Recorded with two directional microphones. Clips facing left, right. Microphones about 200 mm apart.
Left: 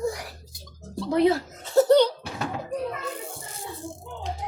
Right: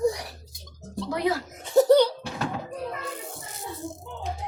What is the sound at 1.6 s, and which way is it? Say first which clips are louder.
Laughter: even; 15° right (ahead or behind).